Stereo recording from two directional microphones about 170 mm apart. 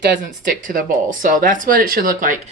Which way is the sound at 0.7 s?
50° right (ahead or behind).